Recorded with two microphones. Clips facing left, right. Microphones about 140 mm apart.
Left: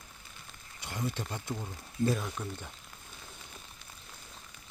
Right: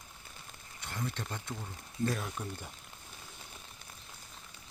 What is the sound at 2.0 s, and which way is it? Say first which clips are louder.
Speech: left 4 dB; centre (ahead or behind).